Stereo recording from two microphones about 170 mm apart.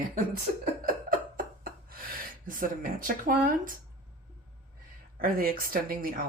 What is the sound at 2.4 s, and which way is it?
Speech, 55° right (ahead or behind).